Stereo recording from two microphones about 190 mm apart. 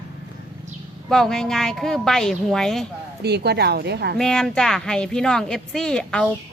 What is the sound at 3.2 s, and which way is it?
Speech, 60° right (ahead or behind).